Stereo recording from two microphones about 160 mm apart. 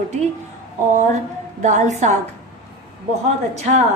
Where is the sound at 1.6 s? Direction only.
50° right (ahead or behind).